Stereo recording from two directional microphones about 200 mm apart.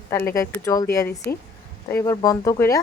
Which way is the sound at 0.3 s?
15° left (ahead or behind).